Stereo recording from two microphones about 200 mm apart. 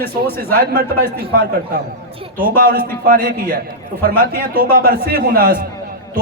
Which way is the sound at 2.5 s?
45° right (ahead or behind).